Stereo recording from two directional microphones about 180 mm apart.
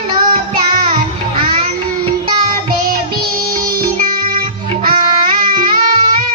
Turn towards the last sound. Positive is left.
turn(degrees=-55)  # may be behind; listen again after turning